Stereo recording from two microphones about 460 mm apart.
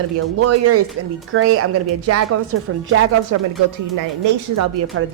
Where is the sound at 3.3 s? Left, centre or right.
Right.